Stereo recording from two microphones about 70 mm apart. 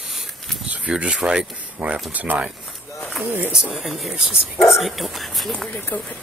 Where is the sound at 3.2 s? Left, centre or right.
Right.